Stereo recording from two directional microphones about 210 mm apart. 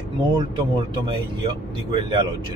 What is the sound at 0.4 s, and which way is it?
Speech, 20° right (ahead or behind).